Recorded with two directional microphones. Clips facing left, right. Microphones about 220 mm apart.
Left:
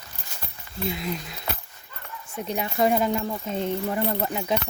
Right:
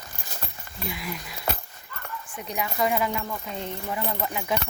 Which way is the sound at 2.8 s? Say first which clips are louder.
Left 4 dB; 40° left (ahead or behind).